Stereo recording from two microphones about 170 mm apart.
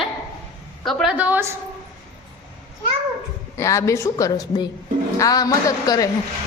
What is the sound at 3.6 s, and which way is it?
A woman's voice, 15° left (ahead or behind).